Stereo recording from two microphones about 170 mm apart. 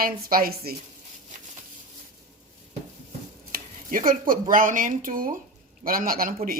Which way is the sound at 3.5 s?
55° right (ahead or behind).